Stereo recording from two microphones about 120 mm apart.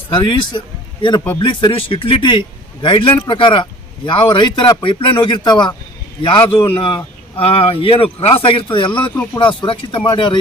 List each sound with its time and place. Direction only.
0.1 s a man's voice: 45° left (ahead or behind)